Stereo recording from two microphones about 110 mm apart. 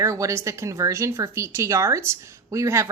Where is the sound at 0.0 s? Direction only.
30° right (ahead or behind).